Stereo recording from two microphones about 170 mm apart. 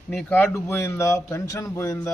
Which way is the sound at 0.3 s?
15° left (ahead or behind).